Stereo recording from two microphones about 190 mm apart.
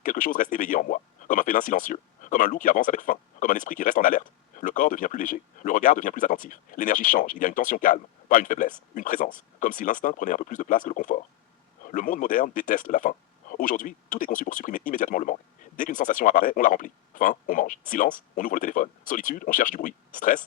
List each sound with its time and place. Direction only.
0.0 s speech: 45° left (ahead or behind)